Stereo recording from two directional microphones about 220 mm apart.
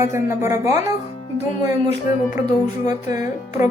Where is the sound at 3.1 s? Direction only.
35° left (ahead or behind).